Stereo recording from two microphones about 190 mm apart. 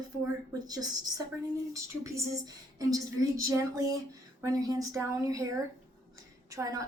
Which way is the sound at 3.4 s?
15° right (ahead or behind).